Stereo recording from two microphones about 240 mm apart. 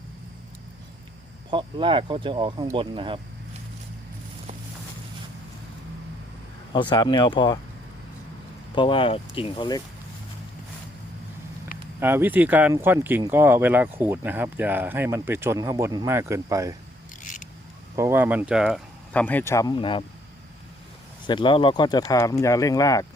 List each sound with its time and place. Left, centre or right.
1.5 s speech: right
6.7 s speech: centre
8.7 s speech: left
11.9 s speech: centre
17.2 s scissors: left
17.9 s speech: centre; by 20.1 s left
21.2 s speech: centre